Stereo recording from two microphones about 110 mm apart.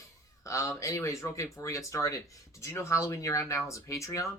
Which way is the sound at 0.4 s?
25° left (ahead or behind).